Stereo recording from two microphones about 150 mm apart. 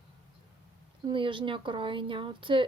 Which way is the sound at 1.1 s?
35° right (ahead or behind).